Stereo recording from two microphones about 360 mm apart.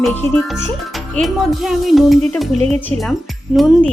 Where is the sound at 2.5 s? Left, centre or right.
Centre.